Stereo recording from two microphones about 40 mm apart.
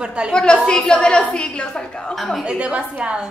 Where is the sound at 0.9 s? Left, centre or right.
Left.